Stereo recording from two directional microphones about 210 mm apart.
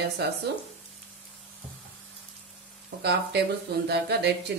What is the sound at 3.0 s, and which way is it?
Speech, 50° right (ahead or behind).